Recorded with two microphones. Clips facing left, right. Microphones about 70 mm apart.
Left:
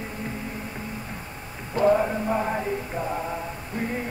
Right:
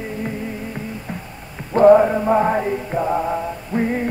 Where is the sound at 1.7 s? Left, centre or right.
Right.